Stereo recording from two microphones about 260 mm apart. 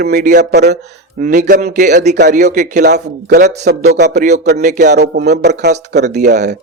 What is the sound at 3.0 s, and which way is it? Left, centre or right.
Speech, right.